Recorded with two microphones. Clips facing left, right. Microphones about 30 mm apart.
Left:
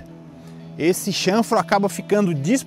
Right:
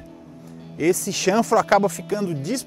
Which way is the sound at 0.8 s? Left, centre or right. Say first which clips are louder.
Left 1 dB; left.